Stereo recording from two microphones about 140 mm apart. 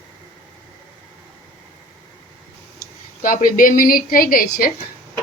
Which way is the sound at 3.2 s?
80° left.